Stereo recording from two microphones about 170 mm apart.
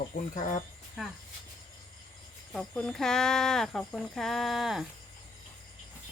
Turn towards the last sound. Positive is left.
turn(degrees=0)  # may be behind; listen again after turning